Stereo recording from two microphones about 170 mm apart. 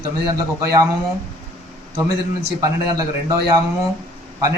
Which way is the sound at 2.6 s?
20° right (ahead or behind).